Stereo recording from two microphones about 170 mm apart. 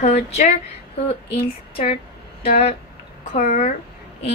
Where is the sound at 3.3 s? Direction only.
45° left (ahead or behind).